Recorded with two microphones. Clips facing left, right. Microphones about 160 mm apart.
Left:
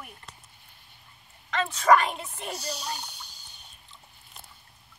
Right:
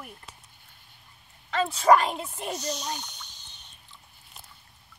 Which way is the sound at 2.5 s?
5° left (ahead or behind).